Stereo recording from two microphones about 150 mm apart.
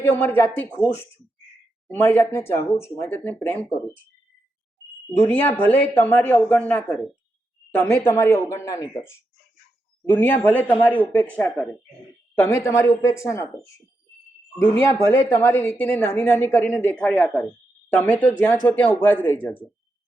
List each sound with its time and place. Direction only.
0.0 s a woman's voice: 15° left (ahead or behind)
2.0 s a woman's voice: 15° left (ahead or behind)
5.1 s a woman's voice: 15° left (ahead or behind)
14.8 s a woman's voice: 20° left (ahead or behind)